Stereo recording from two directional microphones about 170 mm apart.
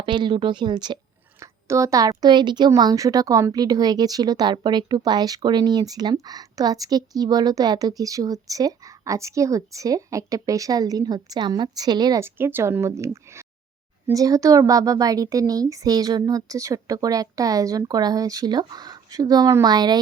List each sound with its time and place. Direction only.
0.0 s a woman's voice: 25° right (ahead or behind)